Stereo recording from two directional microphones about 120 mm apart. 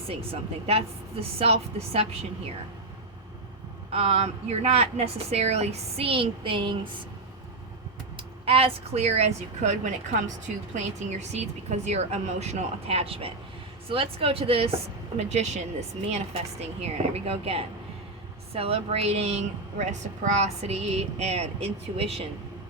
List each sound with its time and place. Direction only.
0.1 s a woman's voice: 55° right (ahead or behind)
3.9 s a woman's voice: 55° right (ahead or behind)
8.1 s a woman's voice: 50° right (ahead or behind); by 10.3 s 90° right
11.3 s a woman's voice: 65° right (ahead or behind)
15.2 s a woman's voice: 70° right (ahead or behind)